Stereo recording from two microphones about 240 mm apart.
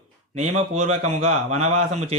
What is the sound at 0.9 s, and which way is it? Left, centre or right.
Speech, right.